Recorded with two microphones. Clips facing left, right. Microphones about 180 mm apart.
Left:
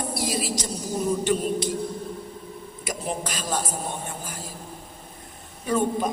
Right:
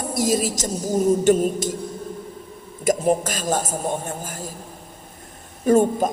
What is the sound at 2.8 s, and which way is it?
A woman's voice, 45° right (ahead or behind).